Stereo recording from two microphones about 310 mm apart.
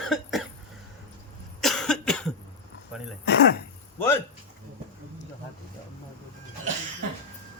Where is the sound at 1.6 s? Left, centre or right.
Centre.